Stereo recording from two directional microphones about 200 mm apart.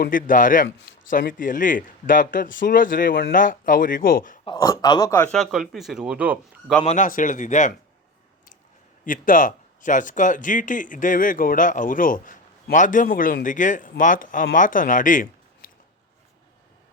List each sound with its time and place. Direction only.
0.0 s a man's voice: 45° left (ahead or behind)
4.4 s speech: 25° left (ahead or behind)
5.3 s speech: centre (ahead or behind)
6.8 s speech: 40° left (ahead or behind)
9.0 s speech: 40° left (ahead or behind)